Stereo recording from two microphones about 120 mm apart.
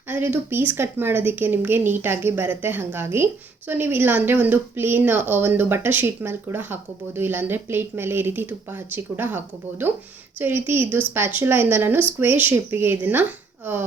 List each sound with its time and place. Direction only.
0.1 s speech: 15° right (ahead or behind)